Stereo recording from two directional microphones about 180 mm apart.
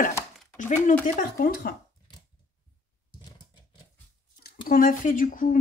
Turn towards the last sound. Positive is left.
turn(degrees=45)  # may be behind; listen again after turning